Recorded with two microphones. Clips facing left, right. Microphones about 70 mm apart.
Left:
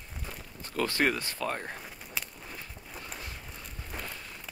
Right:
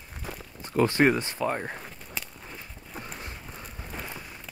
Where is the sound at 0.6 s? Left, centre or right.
Right.